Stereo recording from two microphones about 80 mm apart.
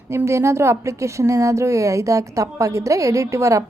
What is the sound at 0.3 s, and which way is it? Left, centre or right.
A woman's voice, right.